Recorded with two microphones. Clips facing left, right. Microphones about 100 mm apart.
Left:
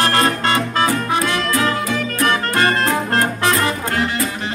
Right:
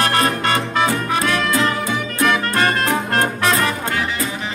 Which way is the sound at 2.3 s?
30° left (ahead or behind).